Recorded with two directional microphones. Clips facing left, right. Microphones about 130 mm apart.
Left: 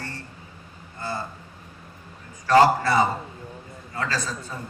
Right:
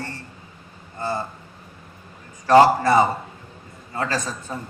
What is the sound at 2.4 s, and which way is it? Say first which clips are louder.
Speech: right 3 dB; 20° right (ahead or behind).